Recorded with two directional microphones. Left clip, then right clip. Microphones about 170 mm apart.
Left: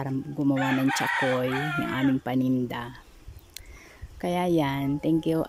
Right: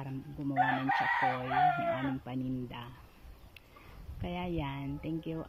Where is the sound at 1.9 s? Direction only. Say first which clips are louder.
Left 10 dB; 60° left (ahead or behind).